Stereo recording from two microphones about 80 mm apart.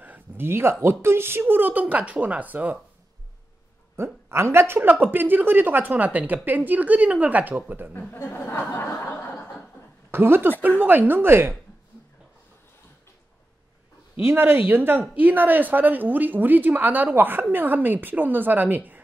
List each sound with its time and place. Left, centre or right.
0.0 s speech: right
3.9 s speech: right
8.1 s speech: left
8.5 s a sound: left
10.1 s speech: right
14.2 s speech: right